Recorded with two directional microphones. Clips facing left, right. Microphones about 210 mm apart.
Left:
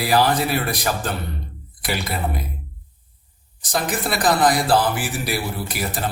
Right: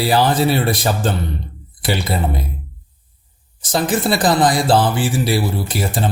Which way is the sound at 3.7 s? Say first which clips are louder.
Right 6 dB; 30° right (ahead or behind).